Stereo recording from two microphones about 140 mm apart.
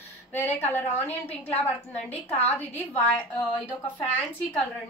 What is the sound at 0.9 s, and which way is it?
A woman's voice, 10° left (ahead or behind).